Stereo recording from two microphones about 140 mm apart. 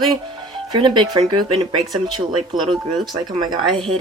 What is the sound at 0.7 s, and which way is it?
Speech, 35° right (ahead or behind).